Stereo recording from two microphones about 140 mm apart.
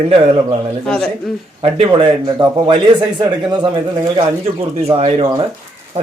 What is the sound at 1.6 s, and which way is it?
Speech, 40° right (ahead or behind).